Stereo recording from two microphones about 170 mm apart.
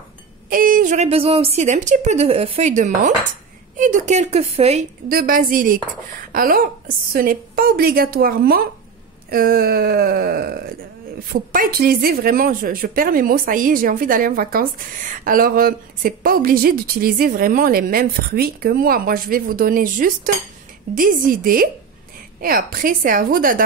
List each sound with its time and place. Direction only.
0.5 s a woman's voice: 55° right (ahead or behind); by 4.8 s 40° right (ahead or behind)
5.0 s speech: 55° right (ahead or behind)